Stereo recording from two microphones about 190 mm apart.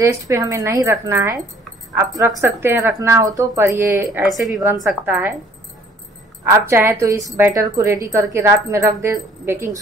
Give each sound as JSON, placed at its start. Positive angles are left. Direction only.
{"t": 0.0, "sound": "a woman's voice", "side_deg": -15}
{"t": 6.4, "sound": "a woman's voice", "side_deg": -15}